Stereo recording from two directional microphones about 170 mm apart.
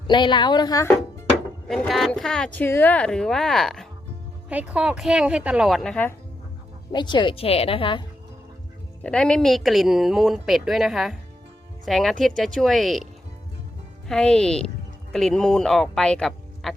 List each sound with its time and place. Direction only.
0.1 s speech: 25° left (ahead or behind)
1.6 s speech: centre (ahead or behind)
6.9 s speech: 25° left (ahead or behind)
9.0 s speech: 5° left (ahead or behind)
14.1 s speech: 5° left (ahead or behind)